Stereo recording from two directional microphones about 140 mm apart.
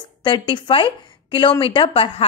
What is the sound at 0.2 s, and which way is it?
Speech, 35° left (ahead or behind).